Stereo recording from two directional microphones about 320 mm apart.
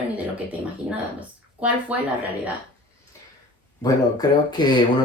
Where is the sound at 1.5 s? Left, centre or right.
Centre.